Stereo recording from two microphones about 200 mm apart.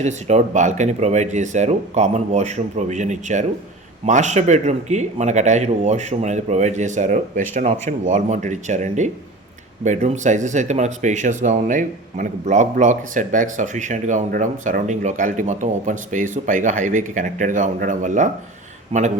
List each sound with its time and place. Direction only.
0.0 s speech: 35° right (ahead or behind)